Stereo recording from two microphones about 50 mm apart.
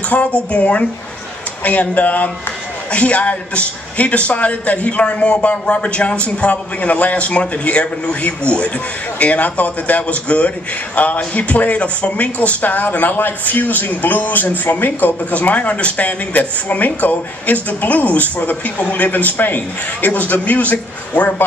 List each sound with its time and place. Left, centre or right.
0.1 s a man's voice: left